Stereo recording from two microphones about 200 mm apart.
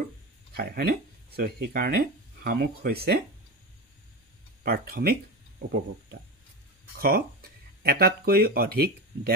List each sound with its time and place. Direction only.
0.6 s speech: 50° right (ahead or behind)
4.6 s speech: 50° right (ahead or behind)
7.0 s speech: 50° right (ahead or behind)